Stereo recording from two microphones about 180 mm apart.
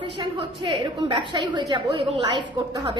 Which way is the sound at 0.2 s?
25° right (ahead or behind).